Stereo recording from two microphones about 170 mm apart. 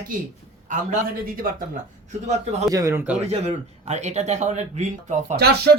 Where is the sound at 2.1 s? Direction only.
40° right (ahead or behind).